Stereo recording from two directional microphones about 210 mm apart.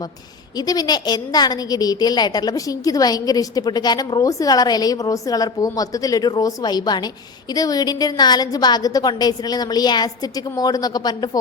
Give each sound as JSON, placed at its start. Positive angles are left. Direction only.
{"t": 0.7, "sound": "a woman's voice", "side_deg": 20}